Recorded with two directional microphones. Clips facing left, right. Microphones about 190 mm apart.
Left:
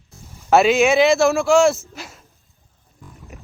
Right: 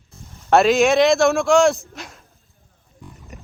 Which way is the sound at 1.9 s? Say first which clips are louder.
Even; centre (ahead or behind).